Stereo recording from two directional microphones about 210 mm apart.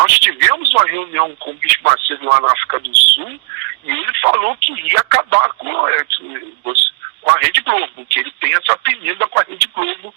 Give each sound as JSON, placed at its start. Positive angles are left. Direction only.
{"t": 0.0, "sound": "speech", "side_deg": -50}